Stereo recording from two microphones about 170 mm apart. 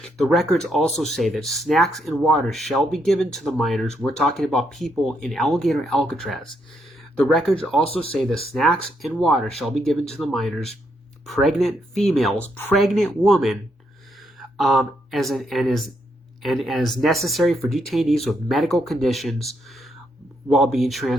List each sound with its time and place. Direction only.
0.0 s speech: centre (ahead or behind)
7.9 s speech: 35° left (ahead or behind)
8.5 s speech: centre (ahead or behind)